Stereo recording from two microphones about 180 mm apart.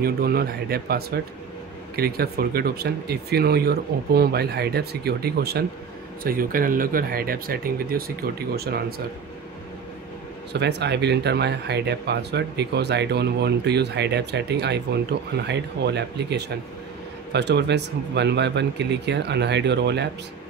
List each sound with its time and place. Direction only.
0.0 s speech: 60° right (ahead or behind)
10.5 s speech: 70° right (ahead or behind)